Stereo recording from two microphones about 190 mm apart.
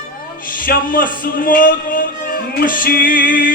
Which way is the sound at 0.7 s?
45° left (ahead or behind).